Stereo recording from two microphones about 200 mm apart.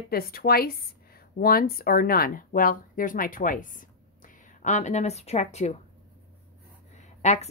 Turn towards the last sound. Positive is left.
turn(degrees=35)  # may be behind; listen again after turning